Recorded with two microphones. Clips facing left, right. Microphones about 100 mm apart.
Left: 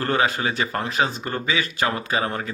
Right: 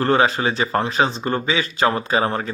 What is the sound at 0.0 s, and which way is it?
Speech, 30° right (ahead or behind).